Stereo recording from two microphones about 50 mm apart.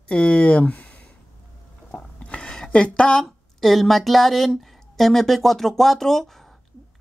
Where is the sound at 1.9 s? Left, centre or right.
Left.